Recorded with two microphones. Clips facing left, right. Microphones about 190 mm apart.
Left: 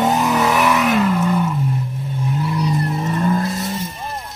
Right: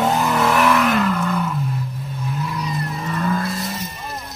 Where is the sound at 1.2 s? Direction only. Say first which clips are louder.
Left 4 dB; 20° left (ahead or behind).